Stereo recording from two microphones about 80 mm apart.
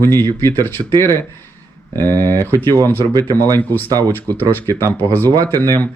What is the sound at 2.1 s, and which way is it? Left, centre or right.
Speech, right.